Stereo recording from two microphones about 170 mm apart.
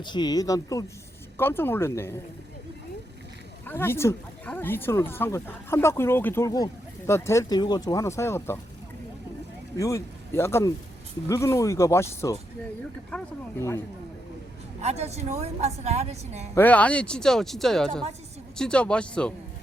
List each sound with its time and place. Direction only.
0.0 s speech: 25° left (ahead or behind)
3.7 s speech: 15° left (ahead or behind)
9.7 s speech: 20° left (ahead or behind)
14.8 s a woman's voice: 40° right (ahead or behind)
16.6 s speech: 10° left (ahead or behind)